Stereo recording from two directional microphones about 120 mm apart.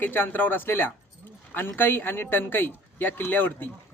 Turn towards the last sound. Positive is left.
turn(degrees=15)  # may be behind; listen again after turning